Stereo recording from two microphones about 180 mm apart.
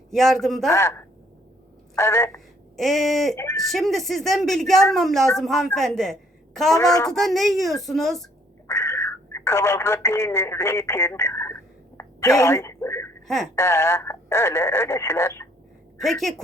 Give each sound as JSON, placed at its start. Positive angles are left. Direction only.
{"t": 0.1, "sound": "a woman's voice", "side_deg": 0}
{"t": 0.7, "sound": "speech", "side_deg": 15}
{"t": 2.3, "sound": "a woman's voice", "side_deg": 0}
{"t": 6.7, "sound": "speech", "side_deg": 20}
{"t": 7.1, "sound": "a woman's voice", "side_deg": 0}
{"t": 8.6, "sound": "speech", "side_deg": 15}
{"t": 12.0, "sound": "a sound", "side_deg": 15}
{"t": 12.4, "sound": "speech", "side_deg": 15}
{"t": 13.2, "sound": "speech", "side_deg": 0}
{"t": 13.6, "sound": "speech", "side_deg": 15}
{"t": 16.0, "sound": "a woman's voice", "side_deg": 0}